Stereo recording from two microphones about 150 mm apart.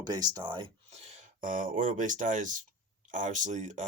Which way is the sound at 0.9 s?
55° right (ahead or behind).